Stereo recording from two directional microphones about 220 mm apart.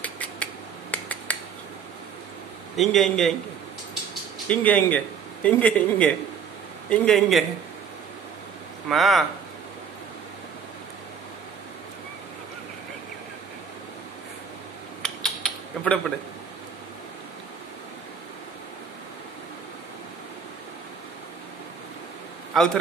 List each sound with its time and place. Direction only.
0.0 s a sound: 5° left (ahead or behind)
0.9 s finger snapping: 5° left (ahead or behind)
2.7 s a man's voice: centre (ahead or behind)
4.5 s a man's voice: 5° left (ahead or behind)
8.8 s a man's voice: centre (ahead or behind)
15.0 s mechanisms: centre (ahead or behind)
22.5 s a man's voice: centre (ahead or behind)